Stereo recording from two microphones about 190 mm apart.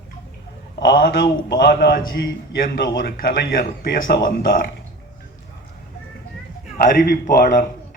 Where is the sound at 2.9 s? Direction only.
50° left (ahead or behind).